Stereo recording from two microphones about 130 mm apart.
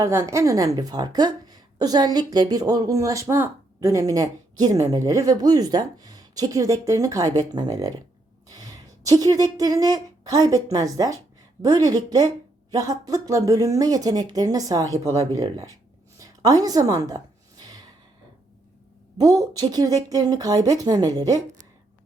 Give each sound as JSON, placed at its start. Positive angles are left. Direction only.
{"t": 0.0, "sound": "a woman's voice", "side_deg": -20}
{"t": 16.1, "sound": "a sound", "side_deg": -25}
{"t": 19.1, "sound": "a woman's voice", "side_deg": -30}